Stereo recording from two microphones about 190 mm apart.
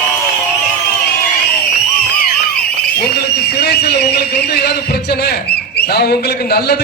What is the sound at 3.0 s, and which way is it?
Speech, 55° left (ahead or behind).